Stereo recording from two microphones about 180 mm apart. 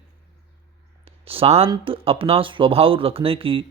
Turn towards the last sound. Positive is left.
turn(degrees=-30)  # may be behind; listen again after turning